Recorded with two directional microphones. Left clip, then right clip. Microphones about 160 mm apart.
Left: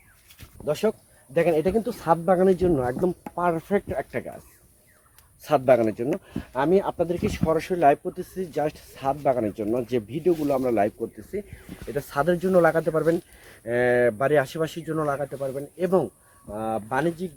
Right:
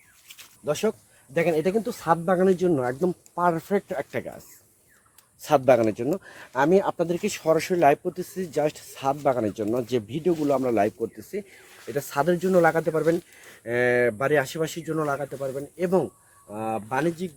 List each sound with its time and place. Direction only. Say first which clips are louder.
0.6 s speech: left 1 dB; 20° right (ahead or behind); by 4.4 s 50° right (ahead or behind)
5.4 s speech: even; 40° right (ahead or behind)
11.9 s speech: even; 30° right (ahead or behind)